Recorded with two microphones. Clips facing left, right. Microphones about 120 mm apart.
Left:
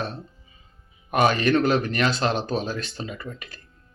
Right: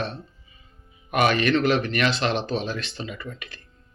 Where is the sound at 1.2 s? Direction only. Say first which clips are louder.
Even; 60° right (ahead or behind).